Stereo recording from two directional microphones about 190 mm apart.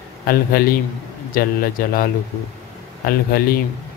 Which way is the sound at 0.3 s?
50° left (ahead or behind).